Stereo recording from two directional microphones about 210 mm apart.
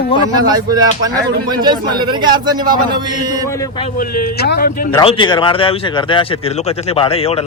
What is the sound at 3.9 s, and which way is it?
Speech, 40° left (ahead or behind).